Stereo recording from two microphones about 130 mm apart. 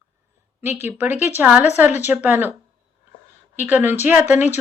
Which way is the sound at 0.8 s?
15° right (ahead or behind).